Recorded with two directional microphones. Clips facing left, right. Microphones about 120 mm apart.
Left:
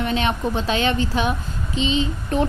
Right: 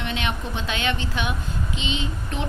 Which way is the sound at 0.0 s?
35° left (ahead or behind).